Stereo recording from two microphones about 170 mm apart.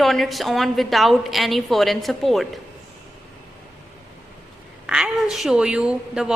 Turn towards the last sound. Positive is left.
turn(degrees=-5)  # may be behind; listen again after turning